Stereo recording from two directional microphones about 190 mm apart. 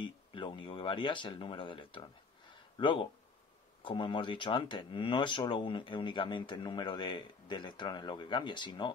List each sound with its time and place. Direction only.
0.0 s speech: 25° left (ahead or behind)